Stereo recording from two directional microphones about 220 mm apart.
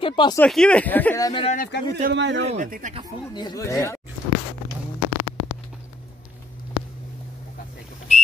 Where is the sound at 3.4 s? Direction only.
15° left (ahead or behind).